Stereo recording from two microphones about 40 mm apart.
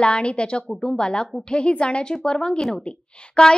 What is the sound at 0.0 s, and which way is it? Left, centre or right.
Speech, left.